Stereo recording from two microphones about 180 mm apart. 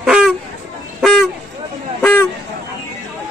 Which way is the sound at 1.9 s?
5° left (ahead or behind).